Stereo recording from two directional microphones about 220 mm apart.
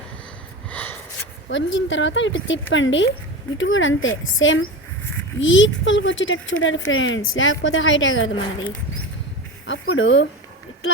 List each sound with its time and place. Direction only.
0.7 s gasp: 10° left (ahead or behind)
1.5 s a woman's voice: 60° left (ahead or behind)
9.6 s a woman's voice: 65° left (ahead or behind)